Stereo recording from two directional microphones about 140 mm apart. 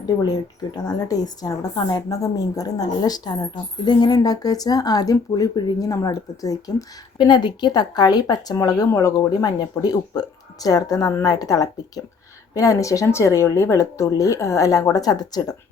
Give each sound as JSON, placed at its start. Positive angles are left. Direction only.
{"t": 0.9, "sound": "a woman's voice", "side_deg": 25}